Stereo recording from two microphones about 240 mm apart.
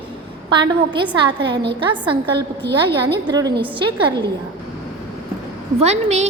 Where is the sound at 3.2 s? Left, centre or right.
Centre.